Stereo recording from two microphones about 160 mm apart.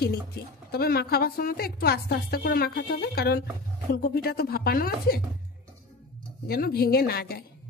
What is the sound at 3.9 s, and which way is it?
A woman's voice, 70° left (ahead or behind).